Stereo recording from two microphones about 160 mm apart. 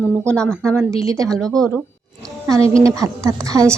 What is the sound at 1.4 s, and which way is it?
Speech, 5° left (ahead or behind).